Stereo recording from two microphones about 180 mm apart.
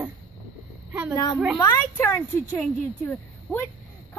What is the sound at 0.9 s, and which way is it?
Speech, 10° right (ahead or behind).